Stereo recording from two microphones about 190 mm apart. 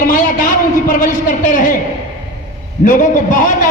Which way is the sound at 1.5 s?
40° left (ahead or behind).